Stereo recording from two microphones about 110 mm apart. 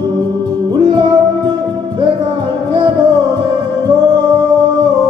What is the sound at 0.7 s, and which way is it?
Music, 45° right (ahead or behind).